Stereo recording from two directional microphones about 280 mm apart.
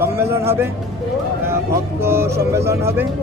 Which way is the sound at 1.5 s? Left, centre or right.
Centre.